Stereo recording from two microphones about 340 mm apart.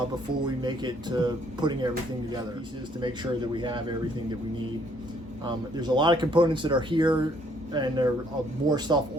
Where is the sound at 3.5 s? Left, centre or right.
Centre.